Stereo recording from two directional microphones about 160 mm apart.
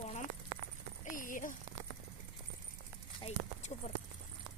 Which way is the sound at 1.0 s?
55° left (ahead or behind).